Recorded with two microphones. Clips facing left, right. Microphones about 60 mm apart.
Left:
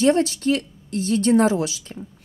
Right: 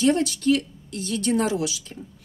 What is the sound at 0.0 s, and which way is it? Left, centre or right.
A woman's voice, left.